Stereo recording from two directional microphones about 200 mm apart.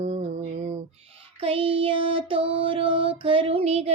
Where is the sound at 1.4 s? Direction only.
25° right (ahead or behind).